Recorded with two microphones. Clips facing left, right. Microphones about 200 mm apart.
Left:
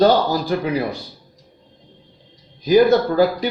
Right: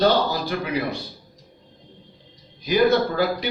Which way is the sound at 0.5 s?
35° left (ahead or behind).